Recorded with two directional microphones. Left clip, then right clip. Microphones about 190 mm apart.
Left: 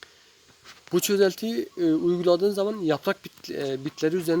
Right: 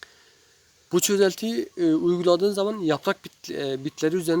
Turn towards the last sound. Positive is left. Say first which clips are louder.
# right 1 dB
turn(degrees=-15)  # may be behind; listen again after turning